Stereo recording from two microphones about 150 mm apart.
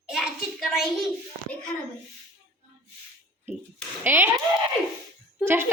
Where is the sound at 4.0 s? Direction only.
15° right (ahead or behind).